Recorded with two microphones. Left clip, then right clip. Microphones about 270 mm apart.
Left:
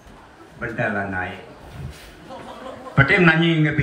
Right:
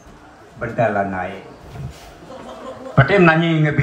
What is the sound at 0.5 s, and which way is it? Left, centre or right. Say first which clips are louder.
Speech: right 6 dB; centre.